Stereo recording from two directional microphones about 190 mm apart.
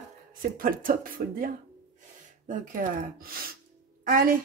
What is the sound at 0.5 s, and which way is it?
A woman's voice, 50° right (ahead or behind).